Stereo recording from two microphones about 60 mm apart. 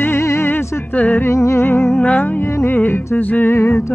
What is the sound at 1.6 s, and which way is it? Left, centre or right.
Music, left.